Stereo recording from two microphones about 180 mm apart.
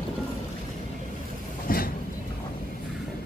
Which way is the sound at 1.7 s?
55° left (ahead or behind).